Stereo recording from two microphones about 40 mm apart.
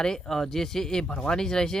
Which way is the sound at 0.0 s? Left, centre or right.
Centre.